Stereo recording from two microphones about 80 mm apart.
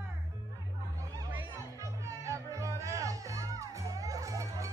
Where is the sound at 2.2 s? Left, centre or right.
Right.